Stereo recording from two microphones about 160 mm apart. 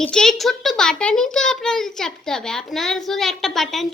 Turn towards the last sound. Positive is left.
turn(degrees=0)  # may be behind; listen again after turning